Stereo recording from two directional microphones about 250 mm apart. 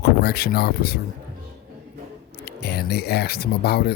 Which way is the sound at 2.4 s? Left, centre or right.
Left.